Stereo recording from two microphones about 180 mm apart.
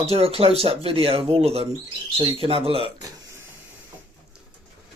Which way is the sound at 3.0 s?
20° right (ahead or behind).